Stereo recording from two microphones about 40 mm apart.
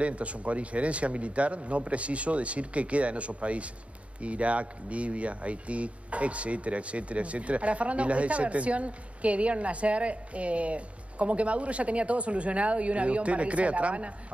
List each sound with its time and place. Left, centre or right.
0.0 s speech: right